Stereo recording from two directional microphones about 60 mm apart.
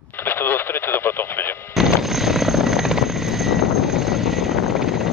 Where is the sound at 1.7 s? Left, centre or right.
Centre.